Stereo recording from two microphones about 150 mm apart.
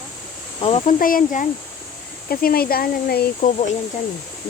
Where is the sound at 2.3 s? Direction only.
85° left.